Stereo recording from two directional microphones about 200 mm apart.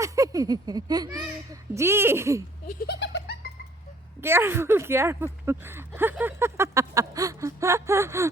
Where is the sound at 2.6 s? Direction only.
50° left (ahead or behind).